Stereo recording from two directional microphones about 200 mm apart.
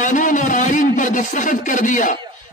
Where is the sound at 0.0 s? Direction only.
40° left (ahead or behind).